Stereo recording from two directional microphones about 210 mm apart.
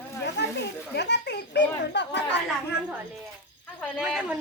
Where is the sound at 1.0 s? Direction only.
55° left (ahead or behind).